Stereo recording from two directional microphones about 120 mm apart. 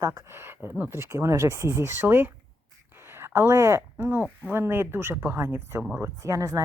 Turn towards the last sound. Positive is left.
turn(degrees=-30)  # may be behind; listen again after turning